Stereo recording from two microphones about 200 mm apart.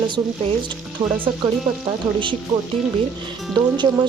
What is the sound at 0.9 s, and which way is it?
Speech, 10° right (ahead or behind).